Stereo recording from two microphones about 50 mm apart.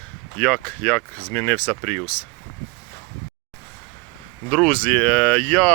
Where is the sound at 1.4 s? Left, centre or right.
Left.